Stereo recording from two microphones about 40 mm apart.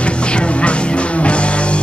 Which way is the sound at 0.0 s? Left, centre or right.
Left.